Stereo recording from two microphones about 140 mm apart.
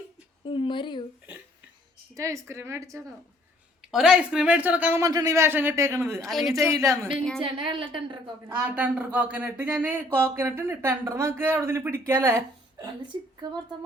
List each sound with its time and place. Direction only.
0.4 s a sound: 40° left (ahead or behind)
2.1 s a man's voice: 20° right (ahead or behind)
3.8 s speech: 5° right (ahead or behind)
5.0 s a man's voice: 25° right (ahead or behind)
7.4 s a woman's voice: 40° right (ahead or behind)
8.4 s speech: 15° right (ahead or behind)
13.4 s a man's voice: 30° right (ahead or behind)